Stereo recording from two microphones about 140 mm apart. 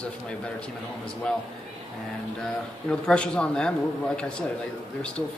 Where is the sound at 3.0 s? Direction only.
5° left (ahead or behind).